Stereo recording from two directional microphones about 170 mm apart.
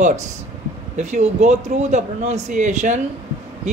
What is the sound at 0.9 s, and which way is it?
A man's voice, 45° right (ahead or behind).